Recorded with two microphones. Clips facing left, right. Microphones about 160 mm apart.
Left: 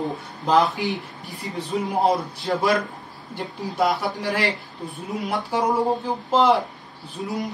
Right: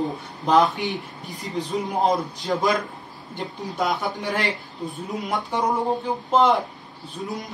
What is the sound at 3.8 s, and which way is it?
Speech, centre (ahead or behind).